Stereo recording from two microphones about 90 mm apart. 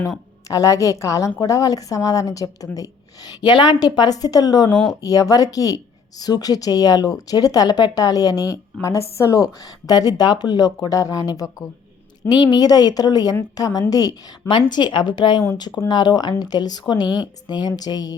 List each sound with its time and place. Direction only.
0.4 s speech: 40° left (ahead or behind)
3.4 s a woman's voice: 60° left (ahead or behind)
14.7 s a woman's voice: 55° left (ahead or behind)